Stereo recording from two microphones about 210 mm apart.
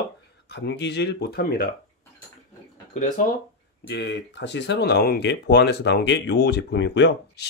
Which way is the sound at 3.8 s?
55° left (ahead or behind).